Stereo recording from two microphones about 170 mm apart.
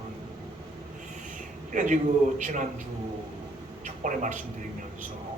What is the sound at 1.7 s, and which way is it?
Speech, 45° right (ahead or behind).